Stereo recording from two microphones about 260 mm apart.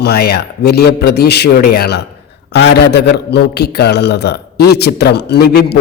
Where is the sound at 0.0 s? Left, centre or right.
Left.